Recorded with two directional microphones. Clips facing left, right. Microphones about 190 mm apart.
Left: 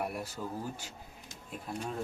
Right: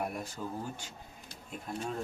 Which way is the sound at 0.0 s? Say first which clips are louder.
Even; 5° left (ahead or behind).